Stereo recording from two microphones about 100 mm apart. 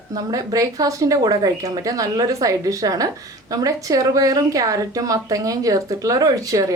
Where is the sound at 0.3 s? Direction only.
40° right (ahead or behind).